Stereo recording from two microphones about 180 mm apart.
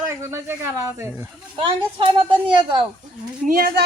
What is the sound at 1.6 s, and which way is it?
A woman's voice, 30° right (ahead or behind).